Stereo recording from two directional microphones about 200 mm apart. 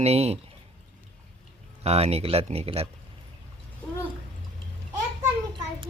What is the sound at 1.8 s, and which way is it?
Speech, 30° right (ahead or behind).